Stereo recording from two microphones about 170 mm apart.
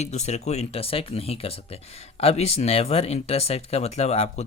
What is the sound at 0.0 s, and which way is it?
Speech, 40° left (ahead or behind).